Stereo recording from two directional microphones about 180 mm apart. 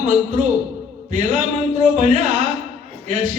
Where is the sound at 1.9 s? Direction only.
40° right (ahead or behind).